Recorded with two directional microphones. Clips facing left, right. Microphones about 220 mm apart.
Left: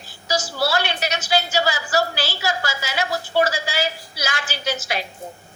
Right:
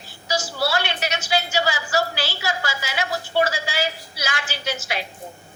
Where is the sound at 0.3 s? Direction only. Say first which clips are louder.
Left 1 dB; 40° left (ahead or behind).